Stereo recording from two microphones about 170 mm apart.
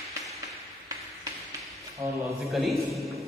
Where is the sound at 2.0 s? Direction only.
35° right (ahead or behind).